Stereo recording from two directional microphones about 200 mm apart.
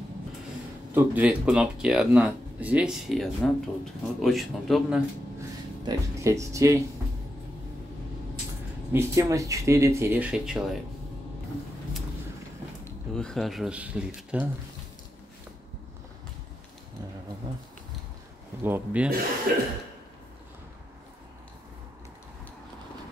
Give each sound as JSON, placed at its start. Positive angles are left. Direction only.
{"t": 0.9, "sound": "speech", "side_deg": -5}
{"t": 5.9, "sound": "speech", "side_deg": -15}
{"t": 8.9, "sound": "speech", "side_deg": -15}
{"t": 12.8, "sound": "speech", "side_deg": 5}
{"t": 18.6, "sound": "speech", "side_deg": -10}
{"t": 19.5, "sound": "cough", "side_deg": -50}